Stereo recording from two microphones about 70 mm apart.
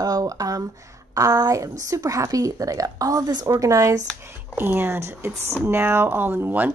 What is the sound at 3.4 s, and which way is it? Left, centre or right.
Speech, right.